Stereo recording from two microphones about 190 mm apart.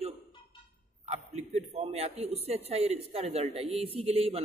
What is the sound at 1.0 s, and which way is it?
A man's voice, 35° right (ahead or behind).